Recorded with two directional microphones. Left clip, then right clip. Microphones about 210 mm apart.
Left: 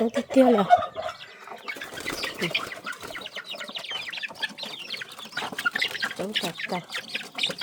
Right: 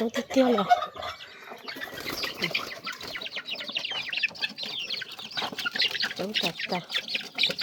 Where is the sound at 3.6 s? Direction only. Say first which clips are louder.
Right 2 dB; 25° left (ahead or behind).